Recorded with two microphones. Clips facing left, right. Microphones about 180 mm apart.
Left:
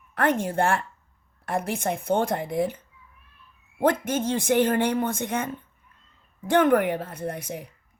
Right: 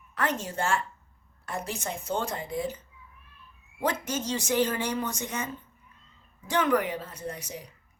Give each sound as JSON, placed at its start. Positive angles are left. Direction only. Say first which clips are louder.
{"t": 0.1, "sound": "a man's voice", "louder": "left 7 dB", "side_deg": 55}
{"t": 6.5, "sound": "a man's voice", "louder": "left 6 dB", "side_deg": 55}